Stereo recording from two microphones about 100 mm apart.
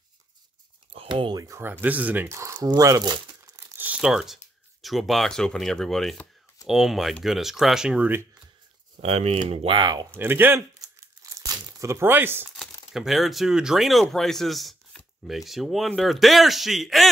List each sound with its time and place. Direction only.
0.9 s a sound: 60° right (ahead or behind)
1.3 s speech: 35° right (ahead or behind)
1.6 s speech: 20° right (ahead or behind)
2.2 s speech: 30° right (ahead or behind)
2.8 s crumpling: 40° right (ahead or behind)
3.7 s crumpling: 15° right (ahead or behind)
4.0 s speech: 5° right (ahead or behind)
9.0 s speech: 90° right
9.8 s speech: 45° right (ahead or behind)
10.1 s speech: 20° right (ahead or behind)
11.3 s crumpling: 35° right (ahead or behind)
12.9 s speech: 5° right (ahead or behind)